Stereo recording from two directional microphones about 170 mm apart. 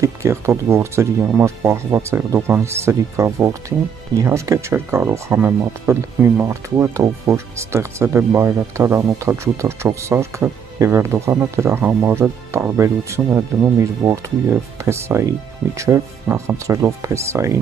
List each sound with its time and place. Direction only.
0.0 s speech: 15° right (ahead or behind)